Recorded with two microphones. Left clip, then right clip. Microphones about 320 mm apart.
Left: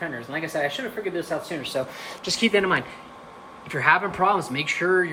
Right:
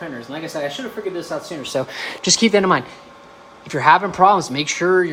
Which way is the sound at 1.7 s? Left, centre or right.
Right.